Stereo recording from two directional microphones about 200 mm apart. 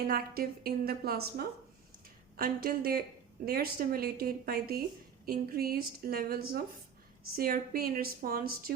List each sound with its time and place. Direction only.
0.1 s a woman's voice: 50° right (ahead or behind)